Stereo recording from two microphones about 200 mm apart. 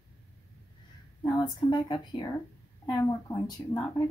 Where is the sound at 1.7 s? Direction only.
20° left (ahead or behind).